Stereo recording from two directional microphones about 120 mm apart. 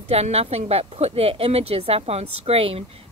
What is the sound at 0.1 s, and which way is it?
A woman's voice, 60° right (ahead or behind).